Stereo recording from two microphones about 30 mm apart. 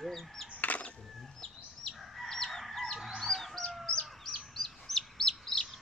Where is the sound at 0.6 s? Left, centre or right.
Left.